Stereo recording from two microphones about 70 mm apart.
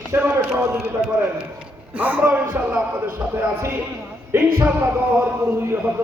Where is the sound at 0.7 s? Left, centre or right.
Centre.